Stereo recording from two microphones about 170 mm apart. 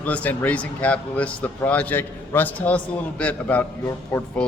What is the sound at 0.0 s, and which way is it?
Speech, 10° left (ahead or behind).